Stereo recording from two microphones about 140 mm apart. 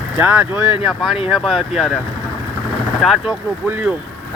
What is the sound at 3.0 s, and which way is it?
Speech, centre (ahead or behind).